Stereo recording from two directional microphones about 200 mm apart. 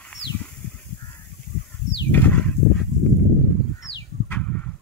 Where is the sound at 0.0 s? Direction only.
5° left (ahead or behind).